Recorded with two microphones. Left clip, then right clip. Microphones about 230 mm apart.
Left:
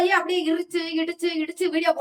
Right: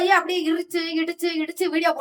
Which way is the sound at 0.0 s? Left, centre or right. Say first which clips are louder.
Right 2 dB; right.